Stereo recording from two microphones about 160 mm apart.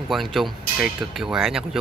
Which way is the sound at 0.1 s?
Centre (ahead or behind).